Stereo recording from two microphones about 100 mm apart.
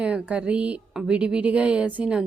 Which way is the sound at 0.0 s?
10° right (ahead or behind).